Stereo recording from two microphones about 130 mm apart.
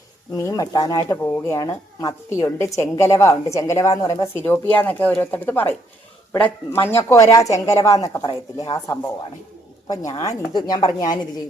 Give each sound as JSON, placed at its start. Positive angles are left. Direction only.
{"t": 0.3, "sound": "a woman's voice", "side_deg": 25}
{"t": 1.2, "sound": "a woman's voice", "side_deg": 20}